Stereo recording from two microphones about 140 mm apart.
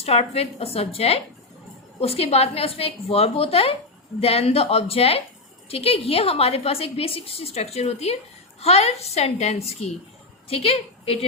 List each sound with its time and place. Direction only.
0.0 s a woman's voice: 45° left (ahead or behind)